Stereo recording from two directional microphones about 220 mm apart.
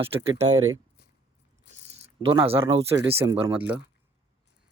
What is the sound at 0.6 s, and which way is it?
Speech, 70° right (ahead or behind).